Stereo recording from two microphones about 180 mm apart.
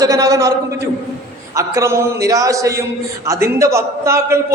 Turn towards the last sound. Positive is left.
turn(degrees=-15)  # may be behind; listen again after turning